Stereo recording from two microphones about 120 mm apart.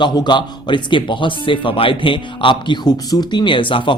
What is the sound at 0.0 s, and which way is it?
Speech, 40° left (ahead or behind).